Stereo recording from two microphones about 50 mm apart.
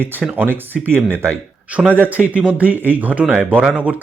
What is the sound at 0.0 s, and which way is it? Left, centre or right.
Speech, right.